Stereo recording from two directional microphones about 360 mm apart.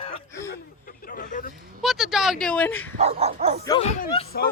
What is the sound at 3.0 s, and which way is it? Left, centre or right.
Speech, centre.